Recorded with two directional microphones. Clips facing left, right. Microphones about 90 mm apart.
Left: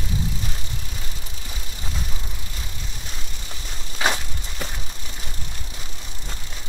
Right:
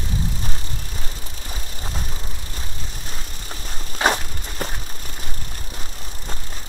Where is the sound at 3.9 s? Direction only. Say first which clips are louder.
Right 4 dB; 40° right (ahead or behind).